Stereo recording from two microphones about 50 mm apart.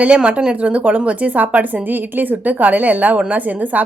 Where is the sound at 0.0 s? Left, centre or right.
Right.